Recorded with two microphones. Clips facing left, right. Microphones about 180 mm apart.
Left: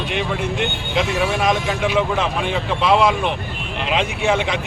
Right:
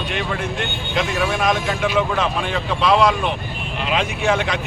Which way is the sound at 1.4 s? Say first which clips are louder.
Left 1 dB; 15° left (ahead or behind).